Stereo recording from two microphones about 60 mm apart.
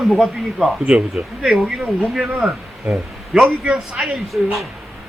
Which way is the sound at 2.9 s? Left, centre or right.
Centre.